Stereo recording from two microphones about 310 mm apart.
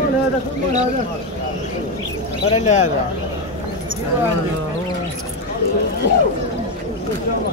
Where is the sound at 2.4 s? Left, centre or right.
Left.